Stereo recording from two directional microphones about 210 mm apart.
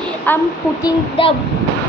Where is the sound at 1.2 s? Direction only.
25° left (ahead or behind).